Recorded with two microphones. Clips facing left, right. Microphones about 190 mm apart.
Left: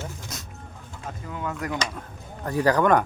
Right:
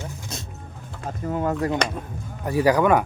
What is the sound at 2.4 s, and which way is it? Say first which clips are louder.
Speech: right 2 dB; 10° right (ahead or behind).